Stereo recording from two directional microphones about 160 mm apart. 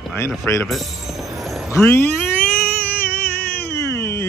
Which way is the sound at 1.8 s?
15° left (ahead or behind).